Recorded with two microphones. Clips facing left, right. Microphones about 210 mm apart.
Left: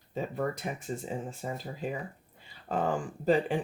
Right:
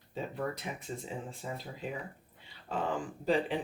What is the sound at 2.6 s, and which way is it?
Speech, 45° left (ahead or behind).